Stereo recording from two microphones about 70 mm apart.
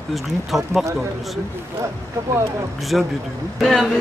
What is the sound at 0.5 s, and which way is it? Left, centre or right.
Speech, centre.